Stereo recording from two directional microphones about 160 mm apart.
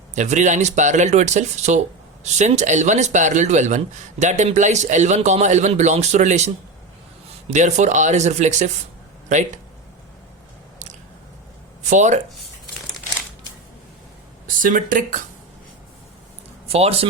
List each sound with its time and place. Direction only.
0.1 s speech: 45° right (ahead or behind)
7.5 s speech: 50° right (ahead or behind)
11.8 s speech: 50° right (ahead or behind)
14.4 s speech: 55° right (ahead or behind)
16.6 s speech: 40° right (ahead or behind)